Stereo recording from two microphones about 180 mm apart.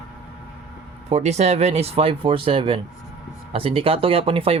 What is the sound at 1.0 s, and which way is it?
Speech, 35° right (ahead or behind).